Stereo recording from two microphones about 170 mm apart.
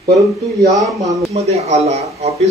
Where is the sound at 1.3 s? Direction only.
40° right (ahead or behind).